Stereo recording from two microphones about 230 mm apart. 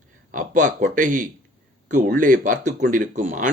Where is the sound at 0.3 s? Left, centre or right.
Right.